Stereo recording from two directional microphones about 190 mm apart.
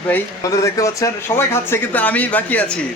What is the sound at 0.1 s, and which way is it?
Speech, 15° left (ahead or behind).